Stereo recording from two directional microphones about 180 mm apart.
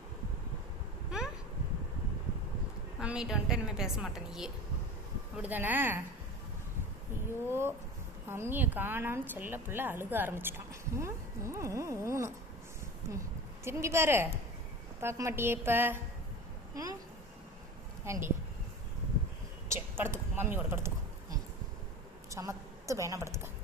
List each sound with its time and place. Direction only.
3.0 s a woman's voice: 5° right (ahead or behind)
7.4 s a woman's voice: 15° right (ahead or behind)
18.0 s speech: 15° right (ahead or behind)
19.6 s a sound: 15° right (ahead or behind)
22.3 s a woman's voice: 15° right (ahead or behind)